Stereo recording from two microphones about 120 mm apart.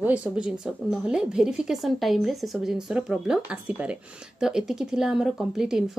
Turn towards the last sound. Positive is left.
turn(degrees=-5)  # may be behind; listen again after turning